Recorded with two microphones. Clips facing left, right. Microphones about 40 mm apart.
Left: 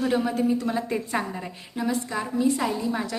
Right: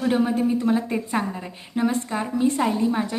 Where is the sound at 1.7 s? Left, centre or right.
Right.